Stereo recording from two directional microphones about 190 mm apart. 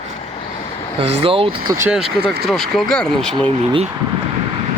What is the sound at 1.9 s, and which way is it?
Speech, 5° right (ahead or behind).